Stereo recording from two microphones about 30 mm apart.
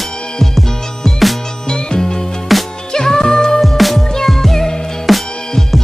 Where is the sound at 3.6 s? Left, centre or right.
Centre.